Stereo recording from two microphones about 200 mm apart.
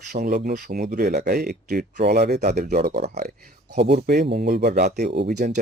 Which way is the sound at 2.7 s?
55° right (ahead or behind).